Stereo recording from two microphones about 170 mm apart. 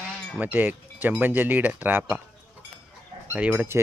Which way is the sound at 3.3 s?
5° right (ahead or behind).